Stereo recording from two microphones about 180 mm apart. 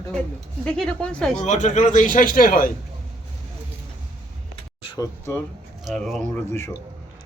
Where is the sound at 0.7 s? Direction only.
5° left (ahead or behind).